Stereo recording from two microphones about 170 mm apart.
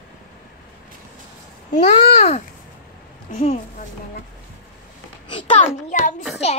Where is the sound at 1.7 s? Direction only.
40° left (ahead or behind).